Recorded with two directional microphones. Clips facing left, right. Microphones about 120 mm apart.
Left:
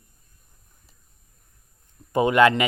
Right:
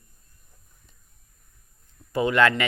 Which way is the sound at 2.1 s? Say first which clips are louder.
Left 3 dB; 20° left (ahead or behind).